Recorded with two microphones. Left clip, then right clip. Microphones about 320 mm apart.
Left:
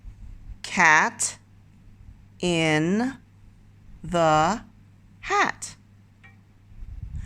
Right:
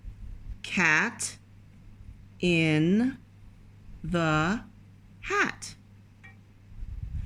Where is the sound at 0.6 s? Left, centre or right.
Centre.